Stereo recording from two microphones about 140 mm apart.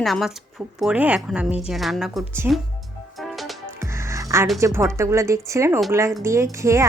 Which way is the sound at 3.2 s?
Centre (ahead or behind).